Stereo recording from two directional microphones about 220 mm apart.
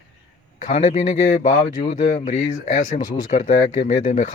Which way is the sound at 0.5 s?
30° left (ahead or behind).